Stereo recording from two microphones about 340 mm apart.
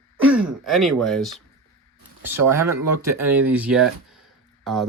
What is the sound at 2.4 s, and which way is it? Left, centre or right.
Speech, right.